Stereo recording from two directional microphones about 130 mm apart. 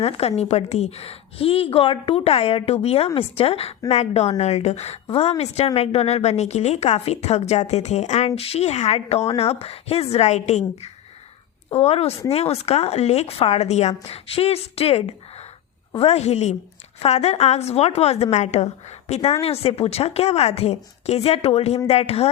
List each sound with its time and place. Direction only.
0.0 s a woman's voice: 50° left (ahead or behind)
11.7 s speech: 55° left (ahead or behind)